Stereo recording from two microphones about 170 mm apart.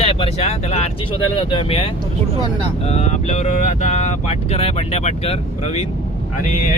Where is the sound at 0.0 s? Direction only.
35° left (ahead or behind).